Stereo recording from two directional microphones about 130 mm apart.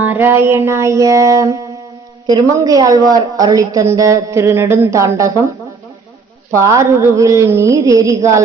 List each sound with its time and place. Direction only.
0.0 s a woman's voice: 15° right (ahead or behind)
6.5 s a woman's voice: 25° right (ahead or behind)